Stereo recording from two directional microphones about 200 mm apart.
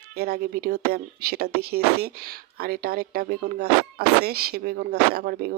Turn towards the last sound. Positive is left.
turn(degrees=-50)  # may be behind; listen again after turning